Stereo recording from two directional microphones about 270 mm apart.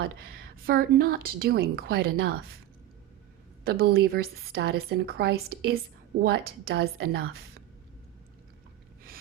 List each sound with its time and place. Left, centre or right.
0.0 s a woman's voice: right
3.6 s a woman's voice: right